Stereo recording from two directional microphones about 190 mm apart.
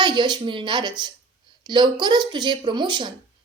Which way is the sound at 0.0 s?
25° right (ahead or behind).